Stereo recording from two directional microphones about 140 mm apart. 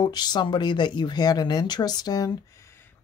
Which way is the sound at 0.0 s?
30° left (ahead or behind).